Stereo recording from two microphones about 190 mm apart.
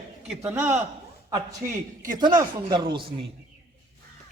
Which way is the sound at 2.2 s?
25° right (ahead or behind).